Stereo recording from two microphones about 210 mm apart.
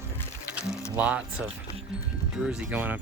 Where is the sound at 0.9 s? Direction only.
5° right (ahead or behind).